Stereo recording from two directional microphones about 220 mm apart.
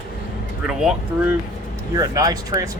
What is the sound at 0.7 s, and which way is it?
Speech, 5° right (ahead or behind).